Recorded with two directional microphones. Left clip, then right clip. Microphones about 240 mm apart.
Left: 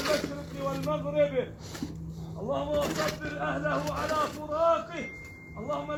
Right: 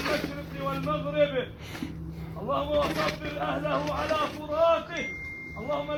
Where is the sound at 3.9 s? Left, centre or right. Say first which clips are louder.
Right 2 dB; left.